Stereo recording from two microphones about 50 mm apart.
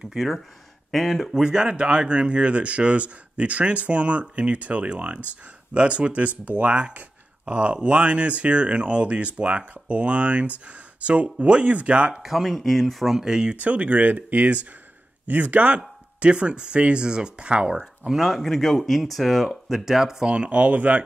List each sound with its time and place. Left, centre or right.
0.1 s speech: centre
1.3 s speech: centre
12.2 s speech: centre
13.2 s speech: centre
13.6 s speech: right
18.0 s speech: centre
20.2 s speech: right